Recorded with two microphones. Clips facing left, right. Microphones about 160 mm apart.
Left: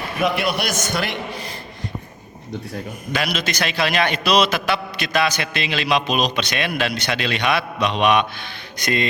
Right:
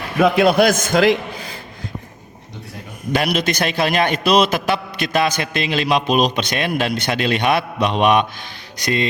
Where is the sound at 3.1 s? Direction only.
55° right (ahead or behind).